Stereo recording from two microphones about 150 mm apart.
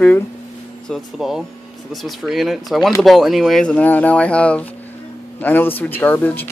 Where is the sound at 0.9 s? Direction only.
Centre (ahead or behind).